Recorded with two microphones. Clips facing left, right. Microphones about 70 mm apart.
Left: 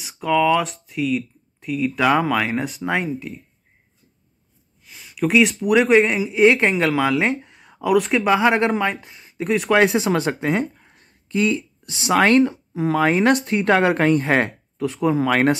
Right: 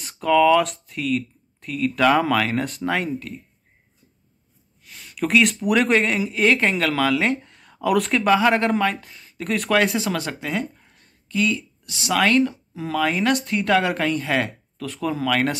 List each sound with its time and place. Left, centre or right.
0.0 s speech: centre
4.8 s speech: centre
6.3 s speech: centre
6.7 s speech: centre
7.4 s a sound: centre
8.3 s speech: centre; by 14.5 s left
14.8 s speech: left